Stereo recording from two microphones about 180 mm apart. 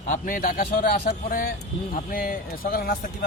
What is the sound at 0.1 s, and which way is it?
A man's voice, 50° left (ahead or behind).